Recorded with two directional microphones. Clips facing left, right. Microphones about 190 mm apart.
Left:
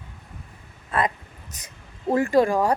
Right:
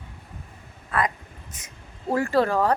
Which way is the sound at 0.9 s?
25° left (ahead or behind).